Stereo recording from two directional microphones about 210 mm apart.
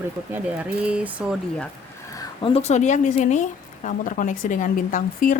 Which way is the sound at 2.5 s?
35° left (ahead or behind).